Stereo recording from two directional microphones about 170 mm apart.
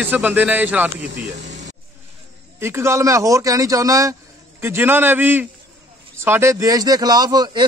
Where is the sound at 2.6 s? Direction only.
15° right (ahead or behind).